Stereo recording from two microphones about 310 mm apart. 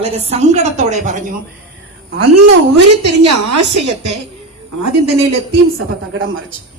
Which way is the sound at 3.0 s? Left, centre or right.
Right.